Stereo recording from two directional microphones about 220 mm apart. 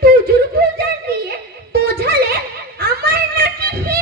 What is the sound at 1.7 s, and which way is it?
Music, 45° right (ahead or behind).